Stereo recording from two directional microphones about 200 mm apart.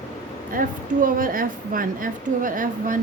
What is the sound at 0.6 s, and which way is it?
A woman's voice, 45° right (ahead or behind).